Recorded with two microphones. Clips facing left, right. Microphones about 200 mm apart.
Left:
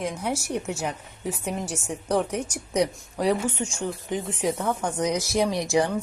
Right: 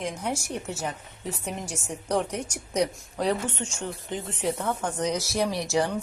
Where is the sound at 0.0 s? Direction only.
10° left (ahead or behind).